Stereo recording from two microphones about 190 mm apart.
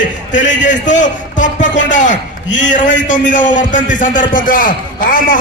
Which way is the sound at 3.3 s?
40° left (ahead or behind).